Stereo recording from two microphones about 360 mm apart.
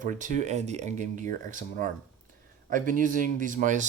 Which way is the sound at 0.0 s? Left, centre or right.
Right.